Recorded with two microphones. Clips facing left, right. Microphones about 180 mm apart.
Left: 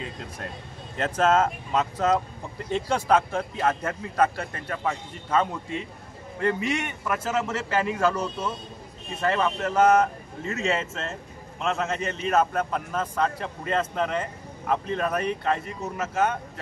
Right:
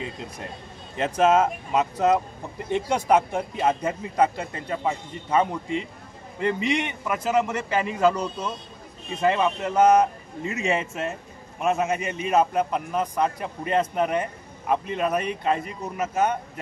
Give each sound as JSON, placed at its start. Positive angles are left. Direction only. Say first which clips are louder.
{"t": 0.9, "sound": "a man's voice", "louder": "right 2 dB", "side_deg": -15}